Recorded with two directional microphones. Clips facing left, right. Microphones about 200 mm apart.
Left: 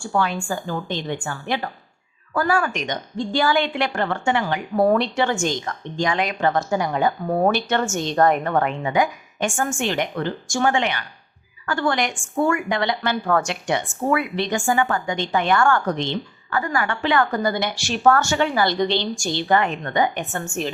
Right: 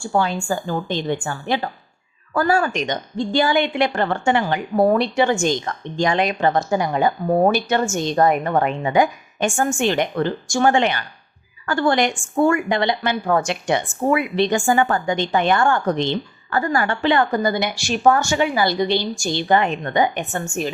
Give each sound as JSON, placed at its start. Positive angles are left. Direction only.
{"t": 0.1, "sound": "a woman's voice", "side_deg": -30}
{"t": 4.0, "sound": "a woman's voice", "side_deg": -30}
{"t": 4.8, "sound": "a woman's voice", "side_deg": -10}
{"t": 6.0, "sound": "a woman's voice", "side_deg": -30}
{"t": 8.8, "sound": "a woman's voice", "side_deg": -25}
{"t": 16.0, "sound": "a woman's voice", "side_deg": -35}